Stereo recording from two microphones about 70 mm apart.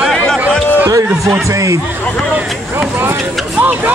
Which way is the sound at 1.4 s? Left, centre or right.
Right.